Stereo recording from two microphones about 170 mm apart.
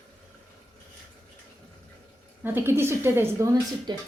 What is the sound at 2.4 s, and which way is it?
A woman's voice, 15° right (ahead or behind).